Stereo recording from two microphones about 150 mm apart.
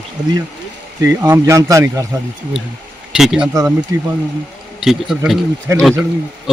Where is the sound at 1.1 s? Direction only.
15° right (ahead or behind).